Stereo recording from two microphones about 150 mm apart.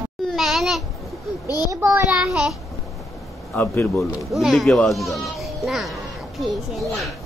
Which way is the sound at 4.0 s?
Centre (ahead or behind).